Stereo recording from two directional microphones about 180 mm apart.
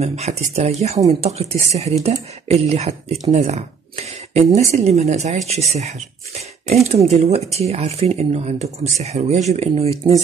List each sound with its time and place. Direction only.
0.0 s speech: 35° right (ahead or behind)